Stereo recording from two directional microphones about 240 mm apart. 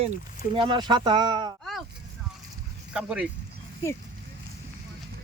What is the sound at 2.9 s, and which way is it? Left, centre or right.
Speech, centre.